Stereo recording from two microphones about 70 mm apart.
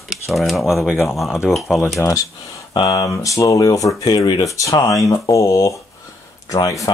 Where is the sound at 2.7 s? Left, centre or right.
Left.